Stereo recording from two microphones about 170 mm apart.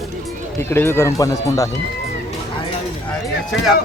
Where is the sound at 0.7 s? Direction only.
15° left (ahead or behind).